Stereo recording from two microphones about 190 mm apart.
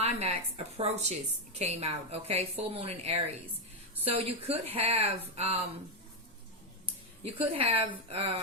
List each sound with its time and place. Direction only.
0.0 s a woman's voice: 35° right (ahead or behind)
7.2 s a woman's voice: 30° right (ahead or behind)